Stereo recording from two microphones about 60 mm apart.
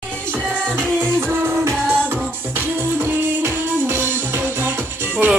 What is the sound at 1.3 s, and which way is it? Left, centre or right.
Music, right.